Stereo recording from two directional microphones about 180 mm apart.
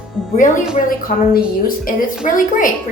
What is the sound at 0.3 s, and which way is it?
A woman's voice, 45° left (ahead or behind).